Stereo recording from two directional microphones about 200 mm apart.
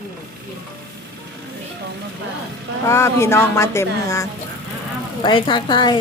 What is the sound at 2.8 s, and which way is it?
A woman's voice, 15° left (ahead or behind).